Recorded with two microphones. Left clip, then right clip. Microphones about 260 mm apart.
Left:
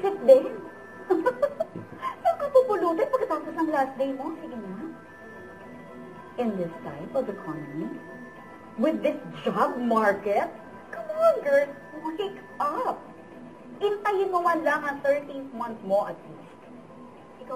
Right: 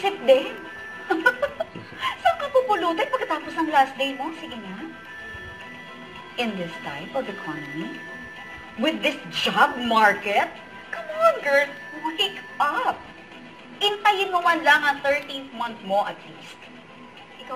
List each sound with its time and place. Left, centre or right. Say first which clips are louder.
0.0 s a woman's voice: left 1 dB; centre
1.0 s a sound: right 3 dB; centre
2.0 s speech: right 4 dB; centre
6.3 s a woman's voice: right 1 dB; centre